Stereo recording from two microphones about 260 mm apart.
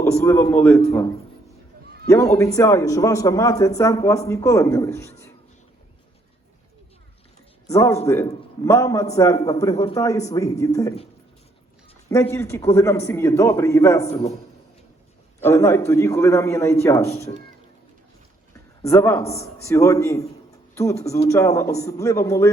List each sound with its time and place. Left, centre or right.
0.0 s a man's voice: centre
2.0 s a man's voice: centre
7.7 s a man's voice: centre
12.0 s a man's voice: centre
14.1 s a man's voice: left
15.4 s a man's voice: centre
18.8 s speech: centre
19.2 s a man's voice: left
19.6 s a man's voice: centre